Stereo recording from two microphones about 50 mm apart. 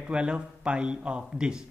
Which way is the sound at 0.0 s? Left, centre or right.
Right.